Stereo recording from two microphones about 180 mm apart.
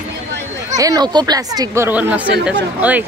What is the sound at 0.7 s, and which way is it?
Speech, 20° right (ahead or behind).